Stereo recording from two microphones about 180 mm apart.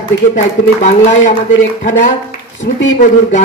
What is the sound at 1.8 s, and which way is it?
Speech, 45° left (ahead or behind).